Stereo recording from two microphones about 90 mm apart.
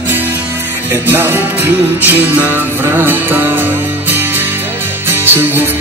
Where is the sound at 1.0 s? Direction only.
25° right (ahead or behind).